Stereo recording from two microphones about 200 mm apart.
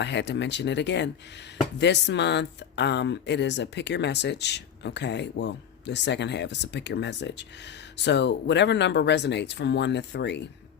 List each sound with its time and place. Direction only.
0.0 s speech: 60° left (ahead or behind)